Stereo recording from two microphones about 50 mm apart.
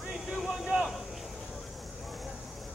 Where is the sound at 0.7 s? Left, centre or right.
Right.